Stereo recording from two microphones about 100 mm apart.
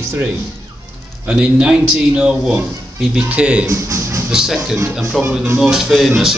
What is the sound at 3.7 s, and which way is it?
Music, 30° right (ahead or behind).